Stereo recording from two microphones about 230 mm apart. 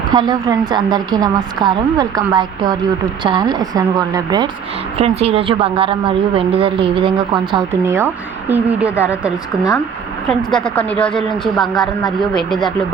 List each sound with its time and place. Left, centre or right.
0.1 s a woman's voice: centre